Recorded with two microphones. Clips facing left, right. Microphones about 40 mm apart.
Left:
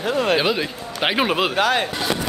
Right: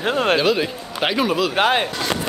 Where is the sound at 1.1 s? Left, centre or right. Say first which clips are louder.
Even; left.